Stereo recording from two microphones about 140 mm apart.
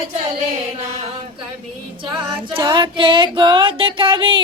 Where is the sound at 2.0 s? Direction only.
35° right (ahead or behind).